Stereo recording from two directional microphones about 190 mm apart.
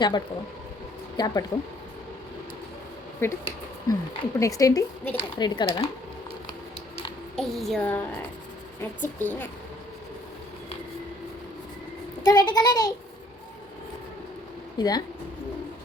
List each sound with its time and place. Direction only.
1.1 s speech: 20° left (ahead or behind)
3.2 s speech: 15° left (ahead or behind)
5.4 s a child's voice: 25° left (ahead or behind)
7.3 s speech: centre (ahead or behind)
12.3 s a child's voice: 20° left (ahead or behind)
14.8 s a child's voice: 20° left (ahead or behind)